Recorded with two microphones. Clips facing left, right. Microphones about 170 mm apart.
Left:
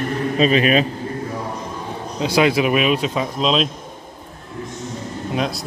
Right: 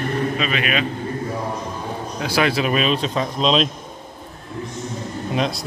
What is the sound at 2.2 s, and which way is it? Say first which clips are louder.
Speech: left 4 dB; 20° left (ahead or behind).